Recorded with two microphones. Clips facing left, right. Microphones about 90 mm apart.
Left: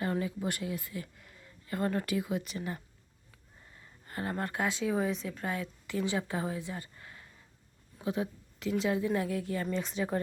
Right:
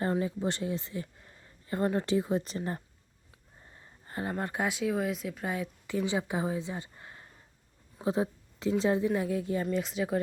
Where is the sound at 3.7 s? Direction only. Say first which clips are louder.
Right 2 dB; 25° right (ahead or behind).